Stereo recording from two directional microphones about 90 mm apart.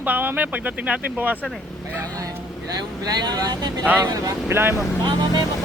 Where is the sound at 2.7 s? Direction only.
45° right (ahead or behind).